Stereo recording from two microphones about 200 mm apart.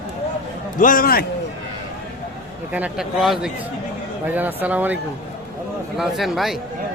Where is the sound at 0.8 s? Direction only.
45° left (ahead or behind).